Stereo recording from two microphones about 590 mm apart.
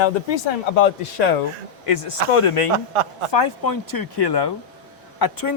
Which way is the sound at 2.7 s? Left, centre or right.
Right.